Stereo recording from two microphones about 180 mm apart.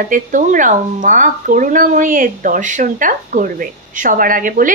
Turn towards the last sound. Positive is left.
turn(degrees=-50)  # may be behind; listen again after turning